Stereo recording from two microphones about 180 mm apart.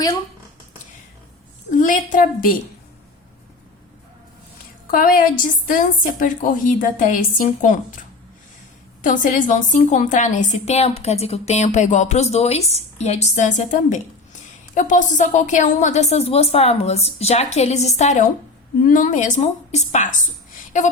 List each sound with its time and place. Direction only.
1.7 s a woman's voice: 45° left (ahead or behind)
4.9 s a woman's voice: 50° left (ahead or behind)